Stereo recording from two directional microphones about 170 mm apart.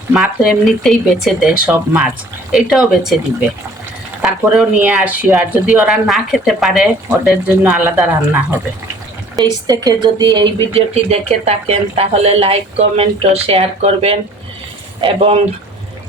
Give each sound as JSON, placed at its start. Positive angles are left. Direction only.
{"t": 0.1, "sound": "speech", "side_deg": 0}
{"t": 4.2, "sound": "speech", "side_deg": -5}
{"t": 9.3, "sound": "speech", "side_deg": -25}
{"t": 10.8, "sound": "speech", "side_deg": -40}